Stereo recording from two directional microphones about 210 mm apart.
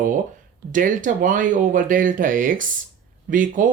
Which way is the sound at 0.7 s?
40° right (ahead or behind).